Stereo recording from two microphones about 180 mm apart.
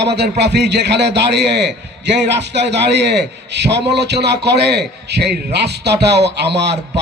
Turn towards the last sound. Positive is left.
turn(degrees=-70)  # may be behind; listen again after turning